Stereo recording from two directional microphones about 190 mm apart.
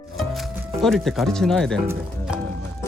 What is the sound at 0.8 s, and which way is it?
Speech, centre (ahead or behind).